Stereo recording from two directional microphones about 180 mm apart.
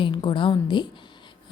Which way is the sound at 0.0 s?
25° left (ahead or behind).